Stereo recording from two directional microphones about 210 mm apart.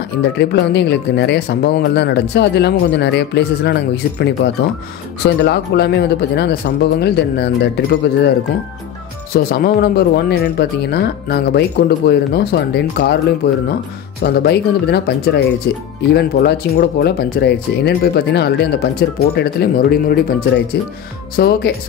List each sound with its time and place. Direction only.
0.4 s speech: 55° left (ahead or behind)
9.3 s speech: 45° left (ahead or behind)